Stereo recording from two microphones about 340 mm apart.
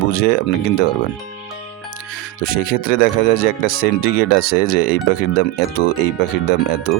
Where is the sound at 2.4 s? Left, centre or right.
Left.